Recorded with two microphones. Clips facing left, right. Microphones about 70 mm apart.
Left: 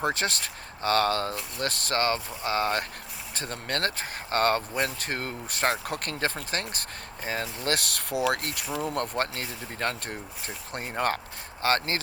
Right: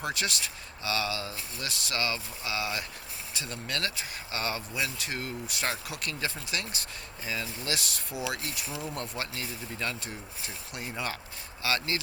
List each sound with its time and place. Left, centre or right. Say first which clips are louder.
0.0 s speech: left 5 dB; left